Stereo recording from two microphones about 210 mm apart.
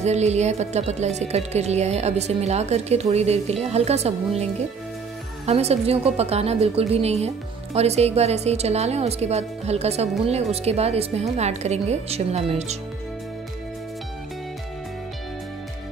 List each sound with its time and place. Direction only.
0.0 s a woman's voice: 30° right (ahead or behind)
5.5 s a woman's voice: 30° right (ahead or behind)